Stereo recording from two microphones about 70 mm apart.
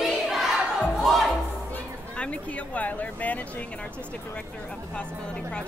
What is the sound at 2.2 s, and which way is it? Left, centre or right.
Speech, centre.